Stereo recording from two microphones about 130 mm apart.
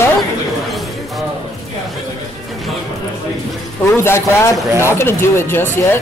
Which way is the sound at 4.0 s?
20° left (ahead or behind).